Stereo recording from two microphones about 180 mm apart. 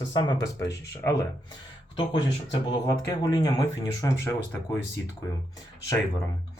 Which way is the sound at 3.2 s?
20° left (ahead or behind).